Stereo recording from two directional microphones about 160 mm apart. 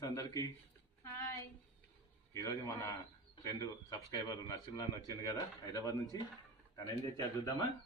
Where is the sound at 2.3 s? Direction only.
20° left (ahead or behind).